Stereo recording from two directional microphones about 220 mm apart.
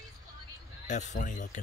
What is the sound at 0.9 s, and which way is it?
Speech, 35° left (ahead or behind).